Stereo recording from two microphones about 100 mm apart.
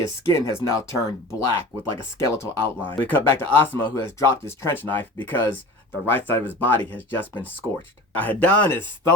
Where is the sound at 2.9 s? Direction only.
20° left (ahead or behind).